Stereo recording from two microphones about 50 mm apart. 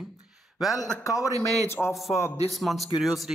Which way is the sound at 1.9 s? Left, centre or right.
Centre.